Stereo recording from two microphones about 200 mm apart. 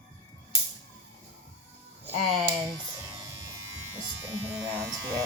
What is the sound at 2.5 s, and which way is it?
Speech, 20° right (ahead or behind).